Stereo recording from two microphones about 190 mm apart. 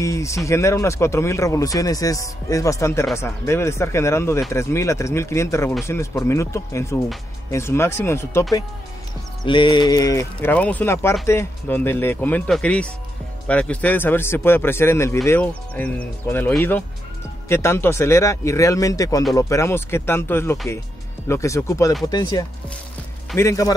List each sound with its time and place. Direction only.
0.0 s speech: 15° left (ahead or behind)
22.0 s chopping: 20° left (ahead or behind)
23.3 s speech: 15° left (ahead or behind)